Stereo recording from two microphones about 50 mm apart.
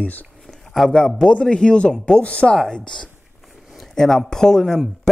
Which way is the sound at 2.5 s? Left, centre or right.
Centre.